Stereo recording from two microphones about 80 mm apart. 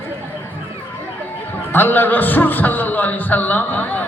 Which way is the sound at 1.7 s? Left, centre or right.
Left.